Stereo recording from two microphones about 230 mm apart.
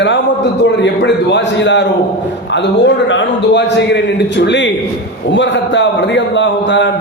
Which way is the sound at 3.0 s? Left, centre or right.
Left.